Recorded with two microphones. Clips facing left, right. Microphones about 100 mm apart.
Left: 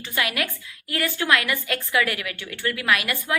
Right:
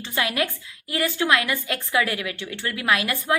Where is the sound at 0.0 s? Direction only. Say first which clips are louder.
Right 2 dB; 25° right (ahead or behind).